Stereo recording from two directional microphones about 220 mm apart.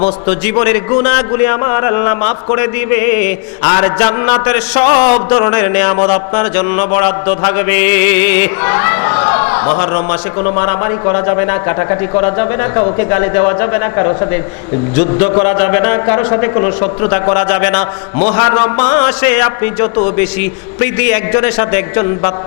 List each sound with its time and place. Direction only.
0.6 s a man's voice: 15° left (ahead or behind)